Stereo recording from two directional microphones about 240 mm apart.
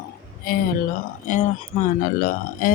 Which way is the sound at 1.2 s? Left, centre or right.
Left.